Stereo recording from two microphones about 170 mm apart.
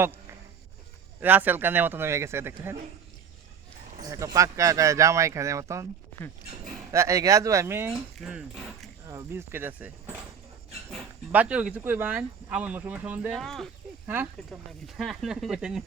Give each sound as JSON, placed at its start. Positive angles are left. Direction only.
{"t": 1.2, "sound": "speech", "side_deg": -10}
{"t": 4.1, "sound": "speech", "side_deg": -20}
{"t": 6.9, "sound": "speech", "side_deg": -15}
{"t": 9.0, "sound": "speech", "side_deg": -15}
{"t": 11.3, "sound": "speech", "side_deg": -10}
{"t": 13.4, "sound": "speech", "side_deg": 0}
{"t": 14.1, "sound": "speech", "side_deg": -10}
{"t": 14.8, "sound": "speech", "side_deg": 0}